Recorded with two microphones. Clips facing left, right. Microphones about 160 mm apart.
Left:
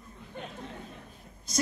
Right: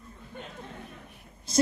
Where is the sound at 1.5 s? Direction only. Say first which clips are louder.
Right 6 dB; 30° right (ahead or behind).